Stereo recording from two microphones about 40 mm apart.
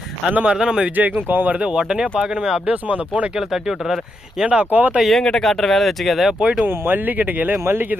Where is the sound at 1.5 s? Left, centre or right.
Right.